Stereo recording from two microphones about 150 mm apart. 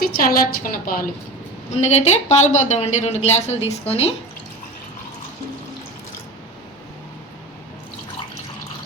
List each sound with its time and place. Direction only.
0.0 s a woman's voice: 70° left (ahead or behind)
1.7 s a woman's voice: 50° left (ahead or behind)